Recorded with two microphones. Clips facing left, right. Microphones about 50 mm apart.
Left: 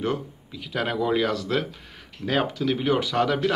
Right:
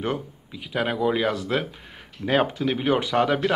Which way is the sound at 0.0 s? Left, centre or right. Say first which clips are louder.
Left 1 dB; right.